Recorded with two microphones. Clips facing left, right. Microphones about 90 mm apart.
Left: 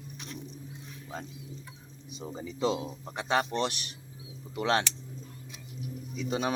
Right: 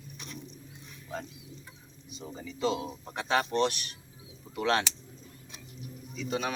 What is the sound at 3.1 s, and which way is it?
Speech, 5° left (ahead or behind).